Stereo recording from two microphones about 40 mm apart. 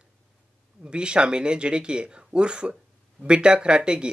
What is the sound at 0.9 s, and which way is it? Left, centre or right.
Speech, right.